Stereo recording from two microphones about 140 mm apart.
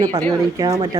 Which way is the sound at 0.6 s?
25° right (ahead or behind).